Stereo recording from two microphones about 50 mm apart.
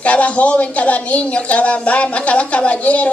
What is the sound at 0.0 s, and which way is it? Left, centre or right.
A woman's voice, left.